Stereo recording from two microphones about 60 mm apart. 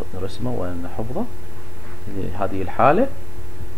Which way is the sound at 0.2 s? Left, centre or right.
Centre.